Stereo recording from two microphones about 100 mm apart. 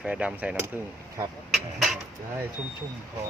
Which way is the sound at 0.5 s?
25° right (ahead or behind).